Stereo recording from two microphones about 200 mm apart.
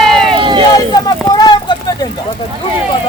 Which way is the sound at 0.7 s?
20° left (ahead or behind).